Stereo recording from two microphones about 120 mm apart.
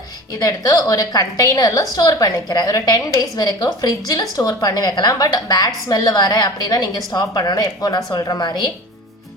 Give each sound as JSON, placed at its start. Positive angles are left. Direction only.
{"t": 0.3, "sound": "a woman's voice", "side_deg": 30}